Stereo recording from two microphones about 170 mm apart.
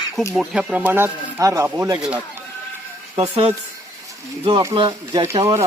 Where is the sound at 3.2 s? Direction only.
35° right (ahead or behind).